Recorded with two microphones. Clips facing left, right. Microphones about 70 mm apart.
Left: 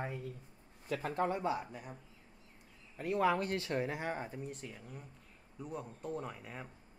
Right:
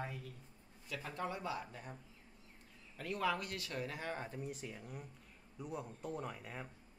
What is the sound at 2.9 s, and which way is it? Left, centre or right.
Speech, left.